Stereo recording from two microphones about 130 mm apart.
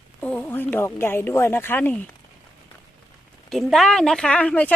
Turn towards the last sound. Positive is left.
turn(degrees=10)  # may be behind; listen again after turning